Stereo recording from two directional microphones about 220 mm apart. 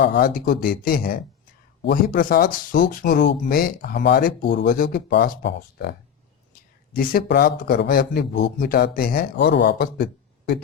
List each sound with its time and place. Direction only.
0.0 s speech: 50° left (ahead or behind)
6.9 s speech: 40° left (ahead or behind)